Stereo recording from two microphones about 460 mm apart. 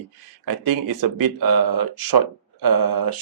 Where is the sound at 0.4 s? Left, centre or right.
Right.